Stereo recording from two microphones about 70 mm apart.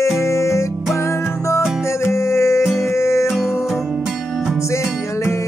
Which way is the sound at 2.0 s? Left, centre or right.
Left.